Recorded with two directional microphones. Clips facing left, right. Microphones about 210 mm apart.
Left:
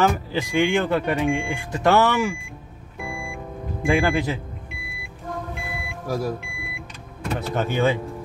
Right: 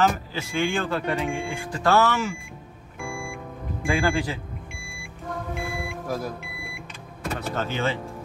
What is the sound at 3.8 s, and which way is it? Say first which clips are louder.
Speech: left 3 dB; 20° left (ahead or behind).